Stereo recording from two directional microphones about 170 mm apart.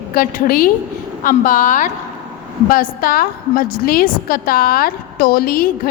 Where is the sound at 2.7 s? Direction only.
60° left (ahead or behind).